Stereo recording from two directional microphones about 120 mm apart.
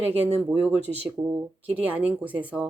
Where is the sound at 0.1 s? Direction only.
60° right (ahead or behind).